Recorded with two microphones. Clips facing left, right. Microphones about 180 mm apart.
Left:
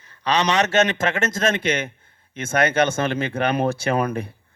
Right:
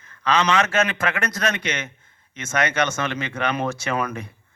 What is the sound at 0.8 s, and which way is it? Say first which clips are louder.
Speech: left 3 dB; 40° left (ahead or behind).